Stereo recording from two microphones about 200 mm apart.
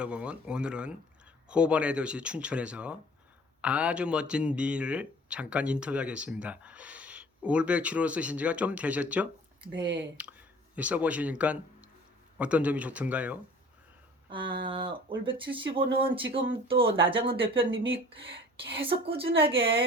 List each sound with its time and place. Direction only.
0.0 s speech: 5° right (ahead or behind)
14.3 s speech: 25° right (ahead or behind)